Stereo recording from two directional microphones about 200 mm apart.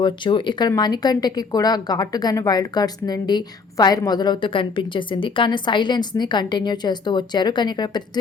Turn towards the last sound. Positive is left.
turn(degrees=20)  # may be behind; listen again after turning